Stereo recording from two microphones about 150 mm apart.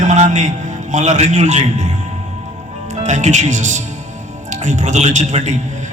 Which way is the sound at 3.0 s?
50° right (ahead or behind).